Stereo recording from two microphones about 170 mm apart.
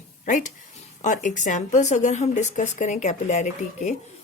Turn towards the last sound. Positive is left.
turn(degrees=40)  # may be behind; listen again after turning